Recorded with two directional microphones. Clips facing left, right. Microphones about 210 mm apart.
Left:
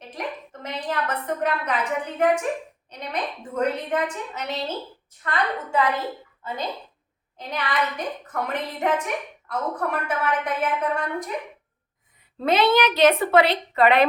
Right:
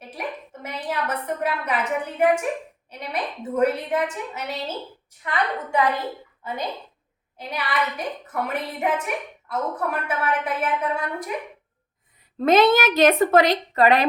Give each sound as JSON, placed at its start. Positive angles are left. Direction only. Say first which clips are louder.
{"t": 0.1, "sound": "a woman's voice", "louder": "even", "side_deg": -10}
{"t": 7.3, "sound": "a woman's voice", "louder": "even", "side_deg": -10}
{"t": 12.5, "sound": "a woman's voice", "louder": "right 3 dB", "side_deg": -50}